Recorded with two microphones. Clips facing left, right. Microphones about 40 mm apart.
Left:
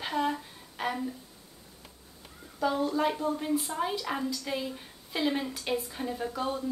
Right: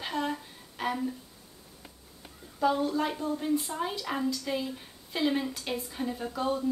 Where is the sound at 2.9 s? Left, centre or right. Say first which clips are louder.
Left 2 dB; centre.